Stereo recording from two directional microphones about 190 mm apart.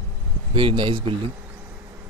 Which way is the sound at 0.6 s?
25° right (ahead or behind).